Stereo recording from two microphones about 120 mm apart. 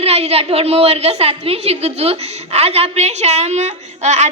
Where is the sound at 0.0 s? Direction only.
55° right (ahead or behind).